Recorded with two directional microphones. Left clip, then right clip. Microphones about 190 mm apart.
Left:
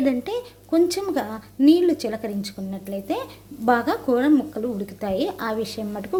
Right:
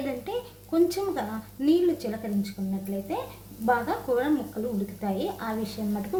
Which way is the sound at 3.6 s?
55° left (ahead or behind).